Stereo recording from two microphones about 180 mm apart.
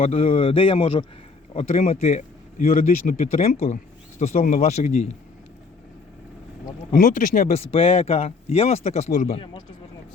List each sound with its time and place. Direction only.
0.0 s speech: 35° left (ahead or behind)
6.9 s speech: 45° left (ahead or behind); by 9.6 s 30° left (ahead or behind)